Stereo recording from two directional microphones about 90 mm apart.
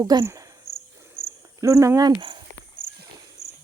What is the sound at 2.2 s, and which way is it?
Speech, 65° right (ahead or behind).